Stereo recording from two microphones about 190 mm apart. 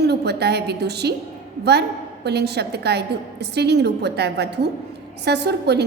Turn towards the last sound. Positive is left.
turn(degrees=-60)  # may be behind; listen again after turning